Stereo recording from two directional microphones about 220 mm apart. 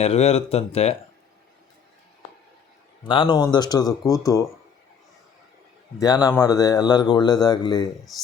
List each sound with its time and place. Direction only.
0.0 s speech: 30° left (ahead or behind)
3.0 s speech: 20° left (ahead or behind)
6.0 s a man's voice: 15° left (ahead or behind)
8.1 s speech: centre (ahead or behind)